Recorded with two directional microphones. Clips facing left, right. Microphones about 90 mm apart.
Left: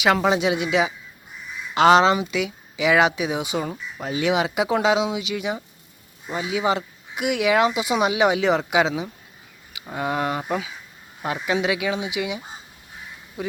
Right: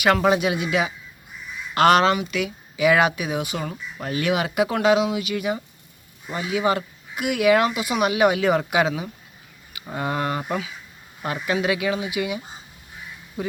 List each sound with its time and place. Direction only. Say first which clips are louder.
0.0 s speech: even; 5° left (ahead or behind)
0.3 s speech: even; 20° left (ahead or behind)
9.8 s speech: left 1 dB; 5° left (ahead or behind)